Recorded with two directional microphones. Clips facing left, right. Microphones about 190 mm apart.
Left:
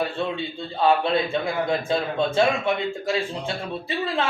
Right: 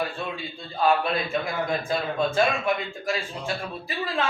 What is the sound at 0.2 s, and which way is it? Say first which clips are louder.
A man's voice: left 6 dB; 25° left (ahead or behind).